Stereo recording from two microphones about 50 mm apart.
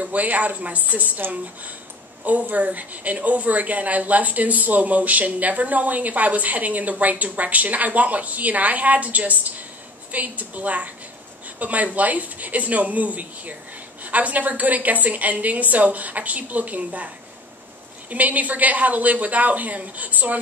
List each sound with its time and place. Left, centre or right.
0.0 s a woman's voice: right
2.2 s a woman's voice: right
18.1 s a woman's voice: right